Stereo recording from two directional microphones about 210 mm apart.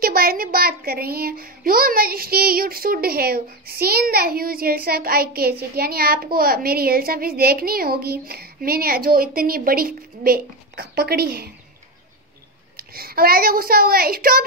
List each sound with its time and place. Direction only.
0.0 s a child's voice: 45° right (ahead or behind)
12.7 s a child's voice: 45° right (ahead or behind)